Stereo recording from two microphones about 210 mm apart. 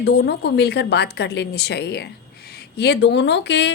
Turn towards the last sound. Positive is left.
turn(degrees=55)  # may be behind; listen again after turning